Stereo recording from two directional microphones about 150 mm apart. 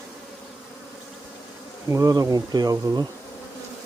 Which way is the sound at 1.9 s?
20° right (ahead or behind).